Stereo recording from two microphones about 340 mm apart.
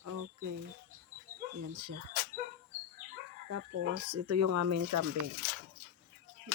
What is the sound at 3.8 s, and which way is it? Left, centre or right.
Speech, right.